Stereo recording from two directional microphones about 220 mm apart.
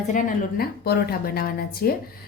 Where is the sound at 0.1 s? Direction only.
45° left (ahead or behind).